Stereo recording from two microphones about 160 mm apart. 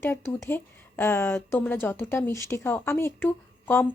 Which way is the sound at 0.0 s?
15° left (ahead or behind).